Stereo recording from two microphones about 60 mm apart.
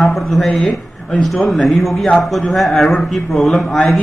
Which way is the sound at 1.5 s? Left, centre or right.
Centre.